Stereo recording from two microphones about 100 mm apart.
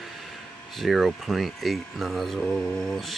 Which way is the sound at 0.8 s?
Centre (ahead or behind).